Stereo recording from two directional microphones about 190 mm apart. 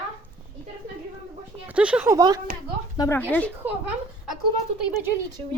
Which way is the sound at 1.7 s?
5° right (ahead or behind).